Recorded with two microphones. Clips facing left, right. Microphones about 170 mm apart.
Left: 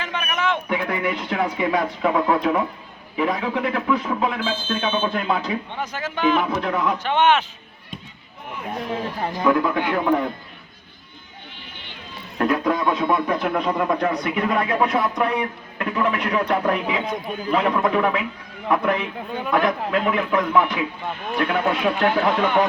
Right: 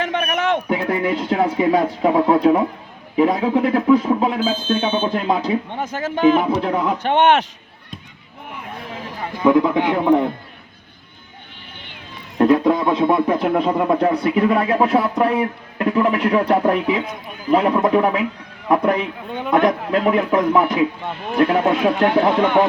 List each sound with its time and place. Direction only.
0.0 s speech: 55° right (ahead or behind)
0.7 s speech: 35° right (ahead or behind)
5.8 s speech: 50° right (ahead or behind); by 6.9 s 30° right (ahead or behind)
7.0 s a man's voice: 60° right (ahead or behind)
9.4 s speech: 20° right (ahead or behind)
12.4 s speech: 25° right (ahead or behind)
19.5 s speech: 20° right (ahead or behind)
19.9 s speech: 35° right (ahead or behind)
21.6 s speech: 20° right (ahead or behind)